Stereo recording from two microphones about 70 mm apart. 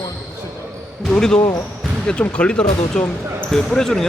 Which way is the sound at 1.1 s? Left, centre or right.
Centre.